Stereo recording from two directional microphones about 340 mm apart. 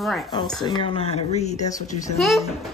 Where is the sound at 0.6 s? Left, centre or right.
Centre.